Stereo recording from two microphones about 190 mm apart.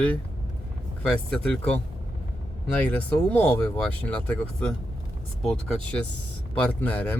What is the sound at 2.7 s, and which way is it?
Speech, 10° left (ahead or behind).